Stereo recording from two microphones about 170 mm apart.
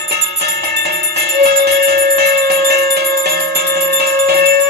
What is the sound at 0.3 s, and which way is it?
Music, 75° right (ahead or behind).